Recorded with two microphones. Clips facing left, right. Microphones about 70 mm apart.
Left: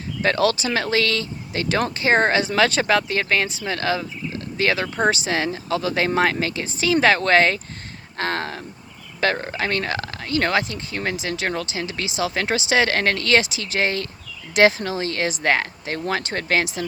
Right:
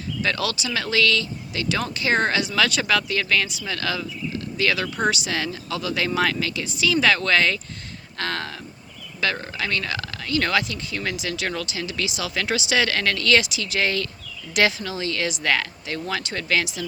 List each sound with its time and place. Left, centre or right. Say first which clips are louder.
0.2 s speech: left 7 dB; left